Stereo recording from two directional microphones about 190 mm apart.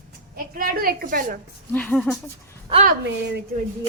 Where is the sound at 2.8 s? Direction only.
50° right (ahead or behind).